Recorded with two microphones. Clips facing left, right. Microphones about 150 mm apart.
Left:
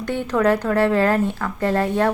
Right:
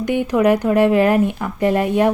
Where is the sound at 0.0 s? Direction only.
15° right (ahead or behind).